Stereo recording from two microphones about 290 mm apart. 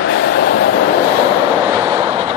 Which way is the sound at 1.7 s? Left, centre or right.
Centre.